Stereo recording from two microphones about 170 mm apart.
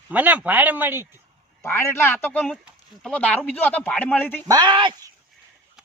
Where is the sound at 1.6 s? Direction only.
15° left (ahead or behind).